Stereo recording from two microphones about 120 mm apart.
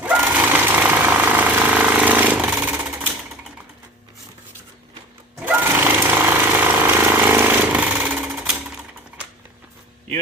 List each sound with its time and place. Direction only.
0.0 s sewing machine: 15° right (ahead or behind)
5.5 s jackhammer: 15° right (ahead or behind)